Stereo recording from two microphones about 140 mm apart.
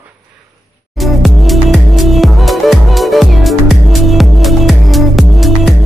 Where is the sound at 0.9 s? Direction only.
Centre (ahead or behind).